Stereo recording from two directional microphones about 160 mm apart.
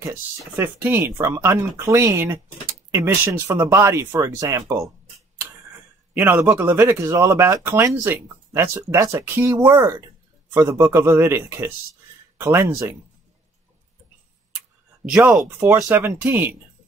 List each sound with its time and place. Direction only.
0.0 s speech: 15° right (ahead or behind)
6.1 s speech: 10° right (ahead or behind)
15.0 s speech: 10° right (ahead or behind)